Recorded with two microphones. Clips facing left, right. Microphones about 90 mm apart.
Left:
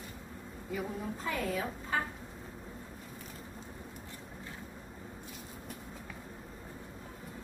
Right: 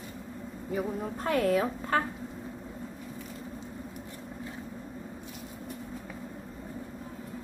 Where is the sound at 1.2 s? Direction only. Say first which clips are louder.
Right 10 dB; 60° right (ahead or behind).